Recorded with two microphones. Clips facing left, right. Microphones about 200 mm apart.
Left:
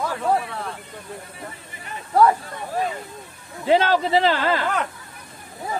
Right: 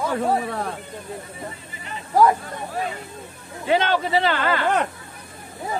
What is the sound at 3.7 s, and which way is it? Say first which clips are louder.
Speech: left 2 dB; 35° left (ahead or behind).